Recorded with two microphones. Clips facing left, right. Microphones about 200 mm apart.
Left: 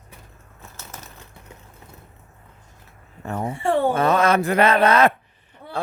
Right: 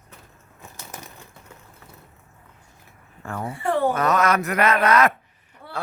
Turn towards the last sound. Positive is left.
turn(degrees=30)  # may be behind; listen again after turning